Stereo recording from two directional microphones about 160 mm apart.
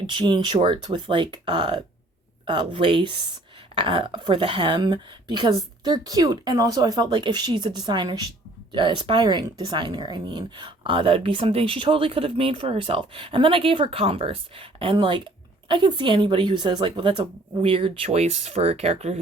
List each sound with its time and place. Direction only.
0.1 s a woman's voice: 30° right (ahead or behind)